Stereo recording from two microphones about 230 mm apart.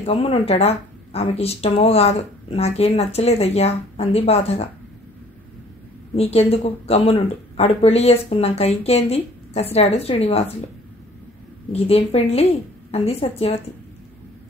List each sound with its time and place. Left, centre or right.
0.0 s speech: left
6.1 s speech: left
11.7 s speech: left